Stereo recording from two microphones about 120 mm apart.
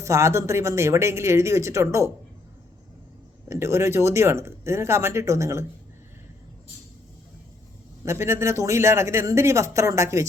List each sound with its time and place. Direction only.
0.0 s a man's voice: 25° right (ahead or behind)
3.5 s a man's voice: 25° right (ahead or behind)
8.0 s a man's voice: 25° right (ahead or behind)